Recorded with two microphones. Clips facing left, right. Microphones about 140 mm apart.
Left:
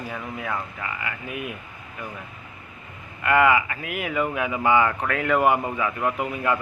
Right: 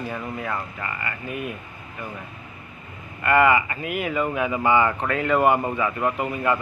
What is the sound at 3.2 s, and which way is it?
A man's voice, 5° left (ahead or behind).